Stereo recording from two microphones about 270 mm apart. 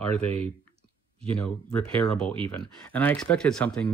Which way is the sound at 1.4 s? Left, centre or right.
Centre.